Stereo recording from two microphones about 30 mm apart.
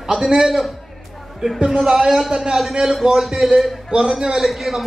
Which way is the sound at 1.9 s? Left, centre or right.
Centre.